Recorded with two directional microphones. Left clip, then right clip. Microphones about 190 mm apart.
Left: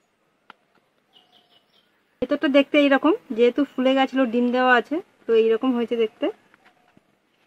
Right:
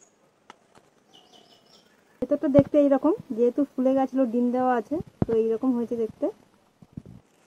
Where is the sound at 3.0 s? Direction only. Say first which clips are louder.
Left 4 dB; 25° left (ahead or behind).